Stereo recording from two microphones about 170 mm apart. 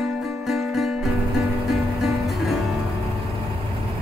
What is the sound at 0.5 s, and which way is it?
Music, centre (ahead or behind).